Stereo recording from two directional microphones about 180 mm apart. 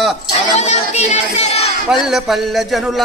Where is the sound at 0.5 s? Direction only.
40° left (ahead or behind).